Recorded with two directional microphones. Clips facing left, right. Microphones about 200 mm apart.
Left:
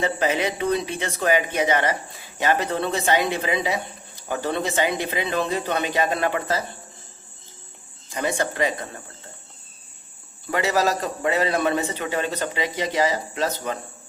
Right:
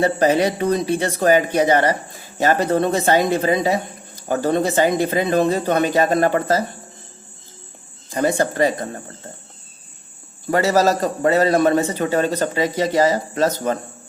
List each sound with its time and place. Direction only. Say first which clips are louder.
0.0 s speech: right 6 dB; 40° right (ahead or behind)
8.1 s speech: right 6 dB; 40° right (ahead or behind)
10.5 s speech: right 6 dB; 40° right (ahead or behind)